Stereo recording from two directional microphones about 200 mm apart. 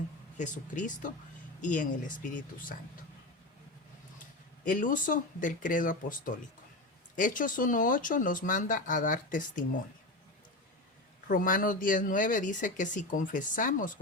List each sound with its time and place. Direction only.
0.3 s speech: 40° left (ahead or behind)
4.6 s speech: 40° left (ahead or behind)
11.3 s speech: 45° left (ahead or behind)